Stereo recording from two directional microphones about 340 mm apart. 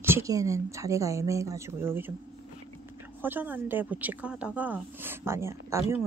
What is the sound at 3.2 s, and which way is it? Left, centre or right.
A woman's voice, centre.